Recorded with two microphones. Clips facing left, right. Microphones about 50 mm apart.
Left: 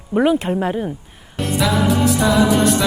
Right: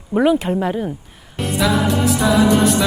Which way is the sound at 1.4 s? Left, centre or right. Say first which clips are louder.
Even; centre.